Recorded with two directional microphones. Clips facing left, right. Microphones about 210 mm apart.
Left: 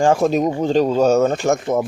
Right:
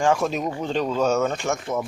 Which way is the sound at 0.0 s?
35° left (ahead or behind).